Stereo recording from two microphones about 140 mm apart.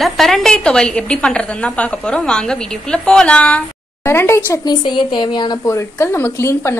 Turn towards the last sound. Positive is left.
turn(degrees=20)  # may be behind; listen again after turning